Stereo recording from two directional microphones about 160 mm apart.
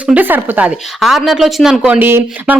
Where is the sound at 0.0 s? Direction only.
10° right (ahead or behind).